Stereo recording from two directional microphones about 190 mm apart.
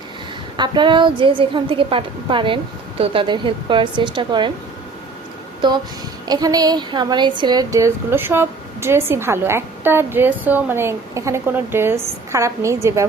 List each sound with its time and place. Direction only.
0.5 s a woman's voice: 25° right (ahead or behind)
5.6 s a woman's voice: 25° right (ahead or behind)